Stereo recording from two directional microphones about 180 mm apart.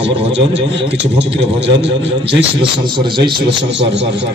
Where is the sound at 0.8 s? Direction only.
80° right.